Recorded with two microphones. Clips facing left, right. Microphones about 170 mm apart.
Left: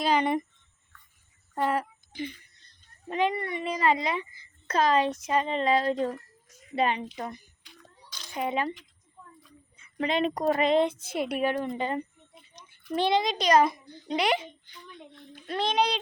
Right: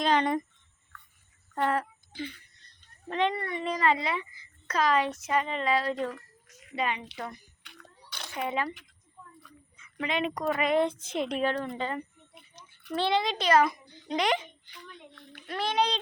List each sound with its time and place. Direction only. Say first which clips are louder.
0.0 s a sound: left 1 dB; 5° left (ahead or behind)
1.5 s a sound: left 1 dB; 10° left (ahead or behind)
3.1 s a child's voice: left 1 dB; 10° left (ahead or behind)
6.7 s a child's voice: left 5 dB; 35° left (ahead or behind)
8.3 s speech: left 2 dB; 20° left (ahead or behind)
9.7 s speech: left 4 dB; 30° left (ahead or behind)
10.8 s a child's voice: left 1 dB; 10° left (ahead or behind)
11.7 s a child's voice: left 3 dB; 20° left (ahead or behind)
15.4 s speech: left 2 dB; 20° left (ahead or behind)